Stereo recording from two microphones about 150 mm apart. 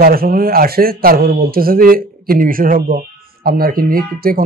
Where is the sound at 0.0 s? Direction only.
80° right.